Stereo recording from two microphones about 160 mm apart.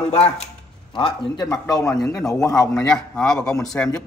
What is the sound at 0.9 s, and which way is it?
A man's voice, 30° left (ahead or behind).